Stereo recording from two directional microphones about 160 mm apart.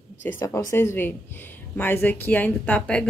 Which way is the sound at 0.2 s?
15° left (ahead or behind).